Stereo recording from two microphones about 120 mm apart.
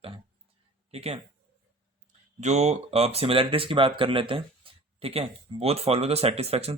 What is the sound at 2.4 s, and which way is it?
Speech, 70° right (ahead or behind).